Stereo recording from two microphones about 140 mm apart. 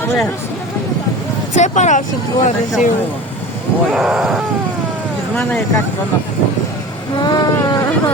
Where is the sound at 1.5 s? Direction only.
60° left (ahead or behind).